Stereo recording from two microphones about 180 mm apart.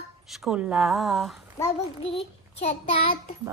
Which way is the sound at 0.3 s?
Centre (ahead or behind).